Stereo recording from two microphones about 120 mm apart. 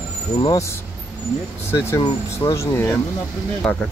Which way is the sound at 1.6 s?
20° left (ahead or behind).